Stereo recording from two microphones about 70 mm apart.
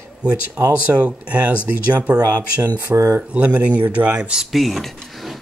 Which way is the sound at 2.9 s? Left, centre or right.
Right.